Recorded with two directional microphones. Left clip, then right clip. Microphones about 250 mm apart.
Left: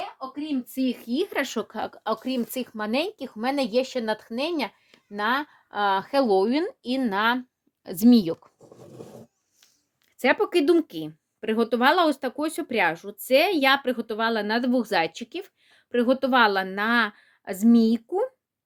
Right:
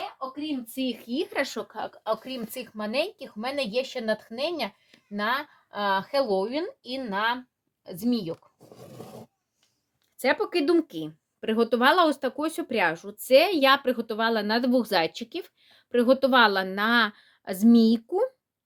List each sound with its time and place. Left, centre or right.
0.8 s a woman's voice: left
1.8 s speech: left
10.2 s speech: left; by 18.3 s centre